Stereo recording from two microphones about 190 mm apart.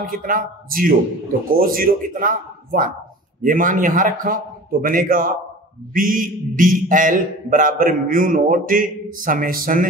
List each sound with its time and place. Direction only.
0.0 s a man's voice: 45° right (ahead or behind)